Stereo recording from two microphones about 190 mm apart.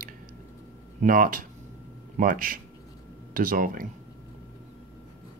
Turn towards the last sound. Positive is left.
turn(degrees=-45)  # may be behind; listen again after turning